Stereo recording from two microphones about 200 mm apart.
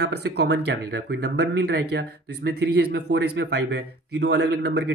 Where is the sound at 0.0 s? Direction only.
55° right (ahead or behind).